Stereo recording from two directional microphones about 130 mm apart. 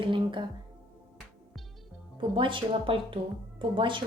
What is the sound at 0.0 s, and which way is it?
Speech, 40° right (ahead or behind).